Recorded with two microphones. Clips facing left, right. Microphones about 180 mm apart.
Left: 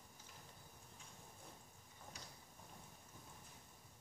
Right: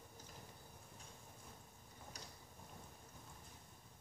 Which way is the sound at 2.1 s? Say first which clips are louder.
Right 2 dB; 40° right (ahead or behind).